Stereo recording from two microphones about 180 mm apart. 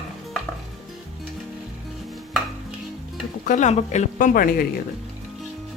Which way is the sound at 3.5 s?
40° left (ahead or behind).